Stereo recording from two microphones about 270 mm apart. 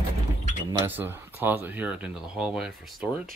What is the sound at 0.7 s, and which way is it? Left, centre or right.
Speech, centre.